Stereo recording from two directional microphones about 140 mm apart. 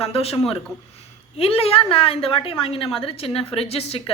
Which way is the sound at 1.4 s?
45° left (ahead or behind).